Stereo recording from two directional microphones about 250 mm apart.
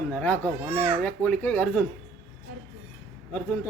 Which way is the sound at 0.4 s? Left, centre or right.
Centre.